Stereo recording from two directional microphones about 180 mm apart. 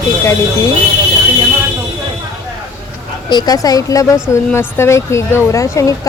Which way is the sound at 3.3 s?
20° left (ahead or behind).